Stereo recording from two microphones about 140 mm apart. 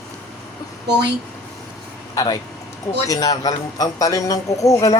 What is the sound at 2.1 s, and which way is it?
A man's voice, 25° left (ahead or behind).